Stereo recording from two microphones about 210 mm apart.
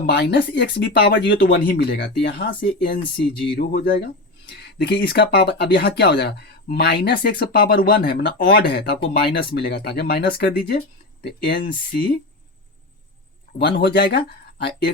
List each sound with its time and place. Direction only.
0.0 s speech: 55° left (ahead or behind)
13.6 s speech: 50° left (ahead or behind)